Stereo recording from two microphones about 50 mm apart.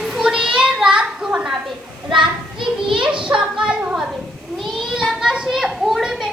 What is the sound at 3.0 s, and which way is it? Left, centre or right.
Speech, centre.